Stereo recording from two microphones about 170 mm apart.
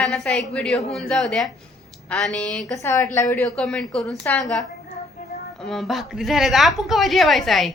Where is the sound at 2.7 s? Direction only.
15° left (ahead or behind); by 7.7 s centre (ahead or behind).